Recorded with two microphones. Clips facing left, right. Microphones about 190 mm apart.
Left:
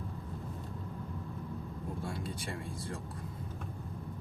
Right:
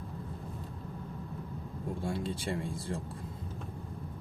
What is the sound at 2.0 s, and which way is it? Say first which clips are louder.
Speech: right 9 dB; 25° right (ahead or behind).